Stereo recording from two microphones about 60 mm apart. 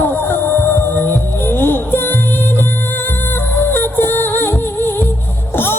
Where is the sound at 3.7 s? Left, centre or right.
Left.